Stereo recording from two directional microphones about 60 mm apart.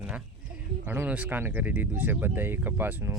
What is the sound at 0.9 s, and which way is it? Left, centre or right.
Speech, right.